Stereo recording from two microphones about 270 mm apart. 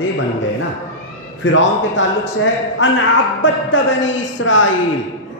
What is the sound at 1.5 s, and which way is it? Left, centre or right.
A man's voice, left.